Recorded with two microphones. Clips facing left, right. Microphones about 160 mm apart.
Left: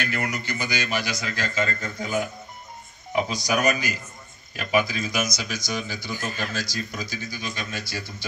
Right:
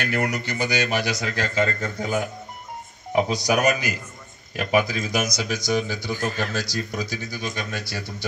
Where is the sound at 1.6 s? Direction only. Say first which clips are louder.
Right 4 dB; 35° right (ahead or behind).